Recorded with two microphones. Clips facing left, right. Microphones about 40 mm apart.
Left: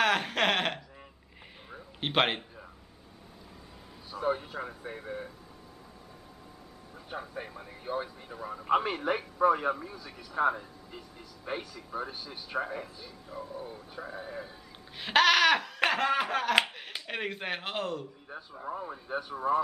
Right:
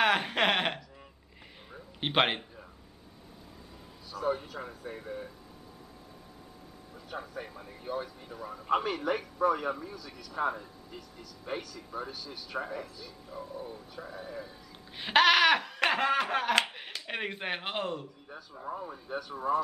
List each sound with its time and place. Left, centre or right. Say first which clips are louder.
0.0 s a sound: even; centre
2.0 s speech: even; centre
4.1 s speech: left 1 dB; centre
7.1 s speech: left 1 dB; centre
15.0 s a man's voice: even; centre
16.6 s a sound: even; centre
17.1 s a man's voice: even; centre
18.3 s speech: left 1 dB; centre